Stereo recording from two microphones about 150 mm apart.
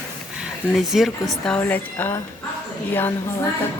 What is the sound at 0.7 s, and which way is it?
Speech, centre (ahead or behind).